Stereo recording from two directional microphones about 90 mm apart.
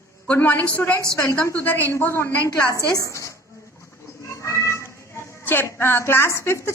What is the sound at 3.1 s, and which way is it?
Speech, 35° left (ahead or behind).